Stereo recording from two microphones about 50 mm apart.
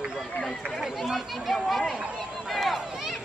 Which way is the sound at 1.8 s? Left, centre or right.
Centre.